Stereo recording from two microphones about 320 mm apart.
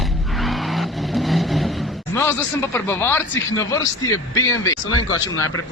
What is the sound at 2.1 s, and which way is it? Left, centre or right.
Speech, centre.